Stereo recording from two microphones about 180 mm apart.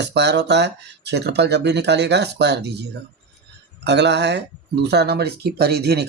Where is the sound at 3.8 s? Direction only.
70° right (ahead or behind).